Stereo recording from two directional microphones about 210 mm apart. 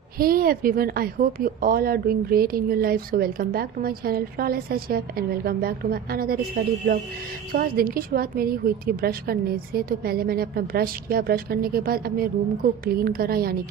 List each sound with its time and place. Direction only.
0.2 s a woman's voice: 45° right (ahead or behind)